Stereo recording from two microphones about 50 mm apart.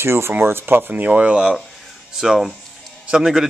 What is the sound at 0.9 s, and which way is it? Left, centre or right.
Speech, right.